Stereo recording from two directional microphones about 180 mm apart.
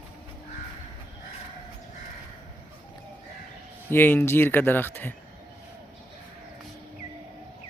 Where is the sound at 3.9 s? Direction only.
10° left (ahead or behind).